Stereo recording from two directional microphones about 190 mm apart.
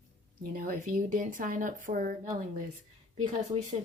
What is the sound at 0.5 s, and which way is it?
Speech, 50° right (ahead or behind).